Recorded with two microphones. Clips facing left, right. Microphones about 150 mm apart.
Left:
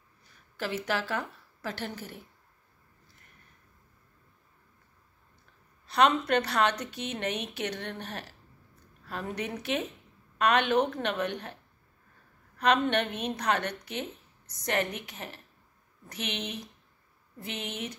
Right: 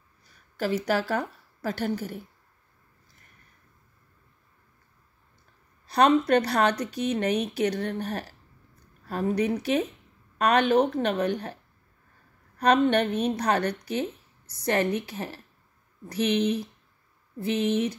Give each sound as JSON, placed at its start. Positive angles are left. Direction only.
{"t": 0.6, "sound": "a woman's voice", "side_deg": -40}
{"t": 5.9, "sound": "a woman's voice", "side_deg": -35}
{"t": 12.5, "sound": "a woman's voice", "side_deg": -40}